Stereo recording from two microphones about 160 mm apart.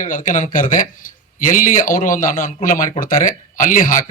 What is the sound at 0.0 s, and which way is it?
Speech, 55° left (ahead or behind).